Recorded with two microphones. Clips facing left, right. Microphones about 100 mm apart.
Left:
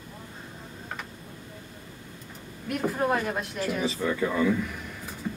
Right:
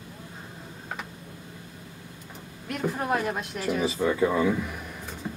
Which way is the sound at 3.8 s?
20° right (ahead or behind).